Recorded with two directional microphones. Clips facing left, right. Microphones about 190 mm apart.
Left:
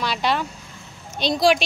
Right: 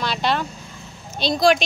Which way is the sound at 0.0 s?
10° left (ahead or behind).